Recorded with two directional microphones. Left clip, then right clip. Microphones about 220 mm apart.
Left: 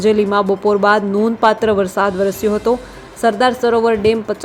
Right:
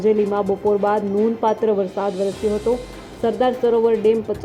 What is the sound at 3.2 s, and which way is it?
Speech, 10° left (ahead or behind).